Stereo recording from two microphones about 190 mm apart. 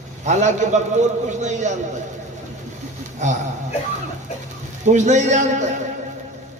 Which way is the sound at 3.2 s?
40° right (ahead or behind).